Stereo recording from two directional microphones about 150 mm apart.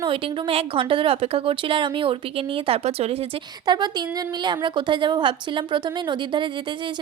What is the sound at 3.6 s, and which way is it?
A woman's voice, 30° right (ahead or behind).